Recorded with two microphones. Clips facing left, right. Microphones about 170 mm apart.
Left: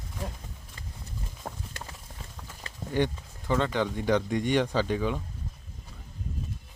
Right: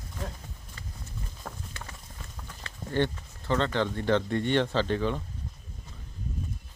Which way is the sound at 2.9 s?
10° left (ahead or behind).